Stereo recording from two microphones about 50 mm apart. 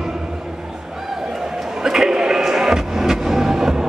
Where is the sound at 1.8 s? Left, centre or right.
Centre.